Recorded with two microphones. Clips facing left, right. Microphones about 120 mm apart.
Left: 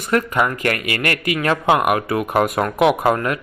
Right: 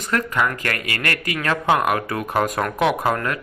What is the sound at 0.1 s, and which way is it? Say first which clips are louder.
A man's voice: left 3 dB; 20° left (ahead or behind).